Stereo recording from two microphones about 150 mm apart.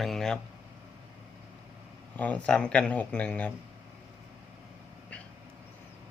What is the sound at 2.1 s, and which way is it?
Speech, 10° left (ahead or behind).